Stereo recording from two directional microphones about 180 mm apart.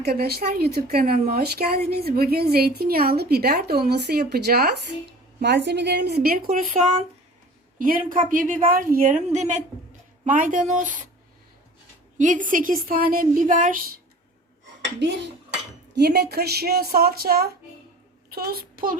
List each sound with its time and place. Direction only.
0.0 s a woman's voice: 60° right (ahead or behind); by 11.0 s 45° right (ahead or behind)
12.1 s a woman's voice: 45° right (ahead or behind)
16.0 s a child's voice: 65° right (ahead or behind)